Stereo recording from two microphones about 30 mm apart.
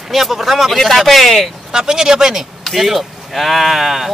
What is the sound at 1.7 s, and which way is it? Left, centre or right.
Speech, right.